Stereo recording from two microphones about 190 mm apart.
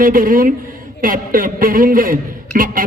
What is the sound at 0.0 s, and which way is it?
A man's voice, 50° right (ahead or behind).